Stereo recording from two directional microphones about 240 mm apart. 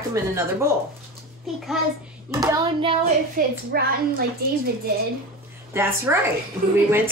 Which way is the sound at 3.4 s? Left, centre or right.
Right.